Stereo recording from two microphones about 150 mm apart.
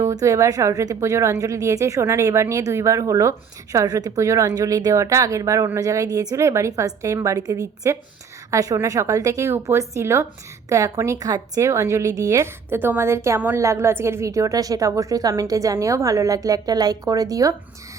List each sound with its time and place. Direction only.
0.0 s a woman's voice: 20° right (ahead or behind)